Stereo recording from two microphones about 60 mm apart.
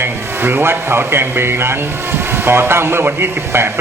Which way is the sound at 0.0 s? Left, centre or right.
Right.